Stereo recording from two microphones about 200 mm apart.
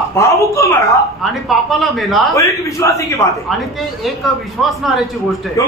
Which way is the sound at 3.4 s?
Centre (ahead or behind).